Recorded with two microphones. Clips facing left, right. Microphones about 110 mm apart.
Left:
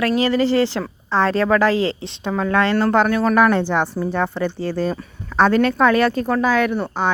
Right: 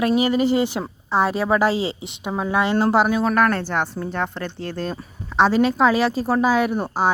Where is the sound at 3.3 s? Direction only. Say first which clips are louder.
Left 4 dB; 10° left (ahead or behind).